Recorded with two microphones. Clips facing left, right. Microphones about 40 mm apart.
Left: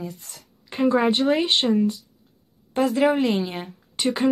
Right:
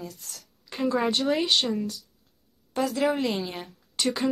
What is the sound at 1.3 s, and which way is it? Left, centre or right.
Speech, centre.